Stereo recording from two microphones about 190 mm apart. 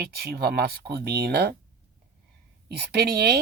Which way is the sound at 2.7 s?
60° right (ahead or behind).